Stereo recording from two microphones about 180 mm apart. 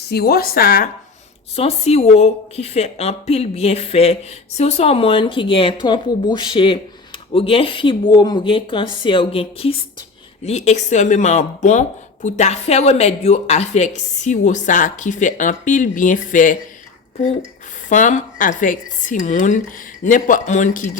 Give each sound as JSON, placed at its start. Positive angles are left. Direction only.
{"t": 0.1, "sound": "a woman's voice", "side_deg": 60}
{"t": 1.5, "sound": "speech", "side_deg": 35}
{"t": 17.8, "sound": "speech", "side_deg": 45}